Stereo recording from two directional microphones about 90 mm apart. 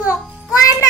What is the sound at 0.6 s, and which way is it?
Child singing, 40° left (ahead or behind).